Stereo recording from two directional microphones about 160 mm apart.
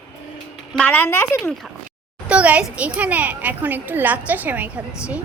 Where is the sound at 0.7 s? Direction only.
10° left (ahead or behind).